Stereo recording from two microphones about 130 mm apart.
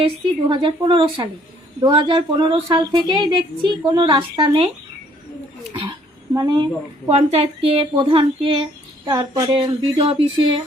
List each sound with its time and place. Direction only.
0.0 s a woman's voice: 40° right (ahead or behind)
6.3 s a woman's voice: 35° right (ahead or behind)
7.1 s speech: 50° right (ahead or behind)
9.0 s a woman's voice: 35° right (ahead or behind)
9.8 s a woman's voice: 45° right (ahead or behind)